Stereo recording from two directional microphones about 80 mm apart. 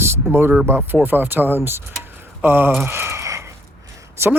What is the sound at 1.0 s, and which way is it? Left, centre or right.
Speech, right.